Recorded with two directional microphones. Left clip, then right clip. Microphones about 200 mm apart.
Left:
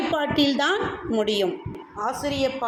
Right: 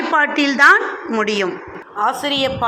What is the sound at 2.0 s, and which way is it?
Speech, 20° right (ahead or behind).